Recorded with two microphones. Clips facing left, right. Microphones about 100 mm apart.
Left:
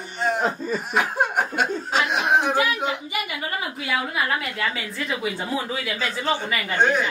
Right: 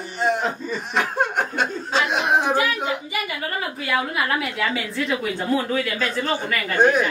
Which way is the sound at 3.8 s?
Centre (ahead or behind).